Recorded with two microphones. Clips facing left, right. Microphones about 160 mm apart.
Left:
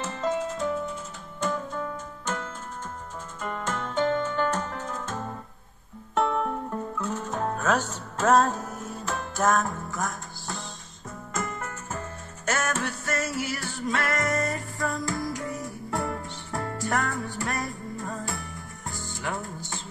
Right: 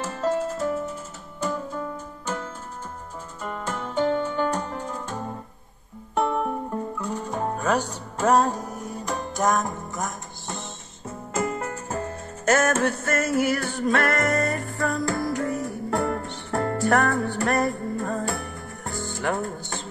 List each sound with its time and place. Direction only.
0.0 s music: 10° right (ahead or behind)
10.0 s music: centre (ahead or behind)
11.1 s music: 30° right (ahead or behind); by 19.8 s 60° right (ahead or behind)